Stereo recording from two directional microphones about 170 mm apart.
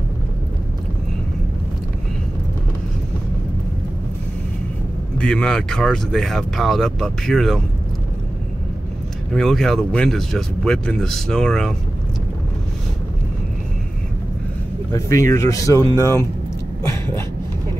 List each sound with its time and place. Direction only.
5.1 s speech: 5° left (ahead or behind)
9.3 s speech: centre (ahead or behind)
14.9 s speech: 20° left (ahead or behind)
16.9 s a sound: 15° left (ahead or behind)